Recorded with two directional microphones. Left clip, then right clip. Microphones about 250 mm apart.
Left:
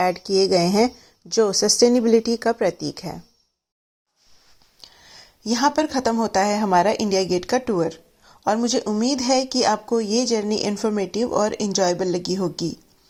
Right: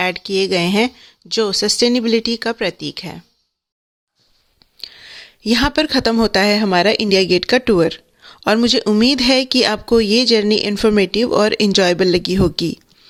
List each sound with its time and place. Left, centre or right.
0.0 s speech: right
4.8 s speech: right